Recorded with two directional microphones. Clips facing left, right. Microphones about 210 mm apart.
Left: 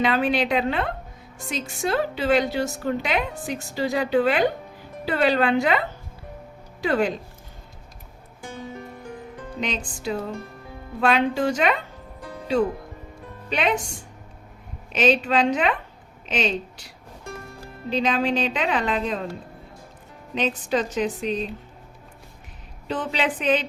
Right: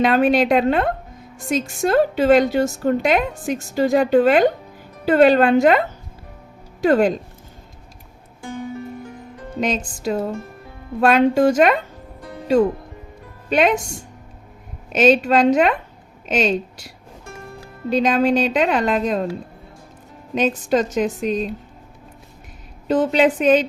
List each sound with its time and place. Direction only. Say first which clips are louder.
0.0 s a woman's voice: right 6 dB; 45° right (ahead or behind)
6.8 s a woman's voice: right 7 dB; 45° right (ahead or behind)
9.6 s a woman's voice: right 7 dB; 45° right (ahead or behind)
13.5 s a woman's voice: right 7 dB; 45° right (ahead or behind)
14.9 s a woman's voice: right 6 dB; 45° right (ahead or behind)
17.9 s a woman's voice: right 6 dB; 45° right (ahead or behind)
20.7 s a woman's voice: right 5 dB; 45° right (ahead or behind)
22.9 s a woman's voice: right 10 dB; 45° right (ahead or behind)